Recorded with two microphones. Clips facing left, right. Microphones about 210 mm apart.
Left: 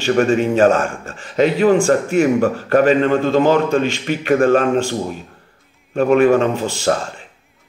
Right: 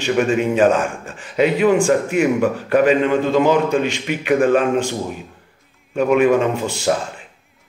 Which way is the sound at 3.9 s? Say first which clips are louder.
Left 2 dB; 40° left (ahead or behind).